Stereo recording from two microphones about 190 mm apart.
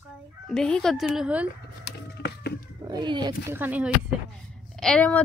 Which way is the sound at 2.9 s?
20° right (ahead or behind).